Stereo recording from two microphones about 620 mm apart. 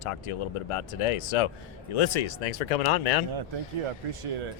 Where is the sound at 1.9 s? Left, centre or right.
Left.